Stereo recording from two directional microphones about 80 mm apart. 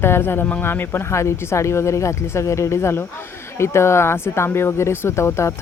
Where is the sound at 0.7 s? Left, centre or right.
Left.